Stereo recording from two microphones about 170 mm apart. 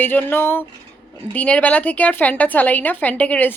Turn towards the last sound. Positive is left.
turn(degrees=10)  # may be behind; listen again after turning